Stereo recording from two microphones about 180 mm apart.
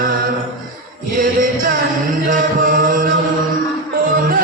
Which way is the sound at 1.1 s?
50° right (ahead or behind).